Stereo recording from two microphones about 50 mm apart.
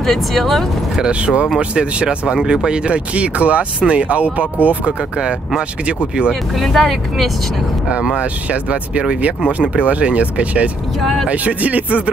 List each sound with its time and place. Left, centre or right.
0.0 s speech: centre
1.0 s speech: right
6.5 s speech: centre
8.0 s speech: right
11.0 s speech: centre
11.2 s speech: right